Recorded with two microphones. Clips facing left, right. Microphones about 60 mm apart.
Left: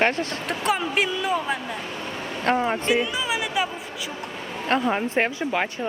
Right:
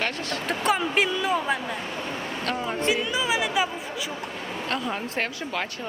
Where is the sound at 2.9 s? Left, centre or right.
Centre.